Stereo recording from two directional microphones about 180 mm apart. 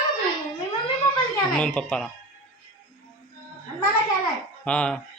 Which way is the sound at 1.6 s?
5° left (ahead or behind).